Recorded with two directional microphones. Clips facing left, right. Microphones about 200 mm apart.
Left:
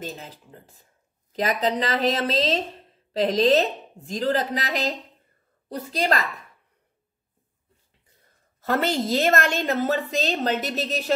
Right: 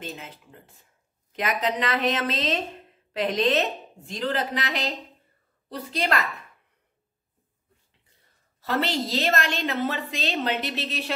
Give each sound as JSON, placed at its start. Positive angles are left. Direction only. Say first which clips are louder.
{"t": 0.0, "sound": "speech", "louder": "left 2 dB", "side_deg": 35}
{"t": 8.5, "sound": "a woman's voice", "louder": "left 3 dB", "side_deg": 50}